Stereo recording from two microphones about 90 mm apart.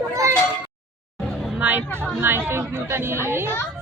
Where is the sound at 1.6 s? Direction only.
20° right (ahead or behind).